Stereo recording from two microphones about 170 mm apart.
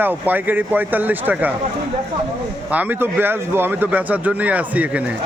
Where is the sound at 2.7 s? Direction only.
10° right (ahead or behind).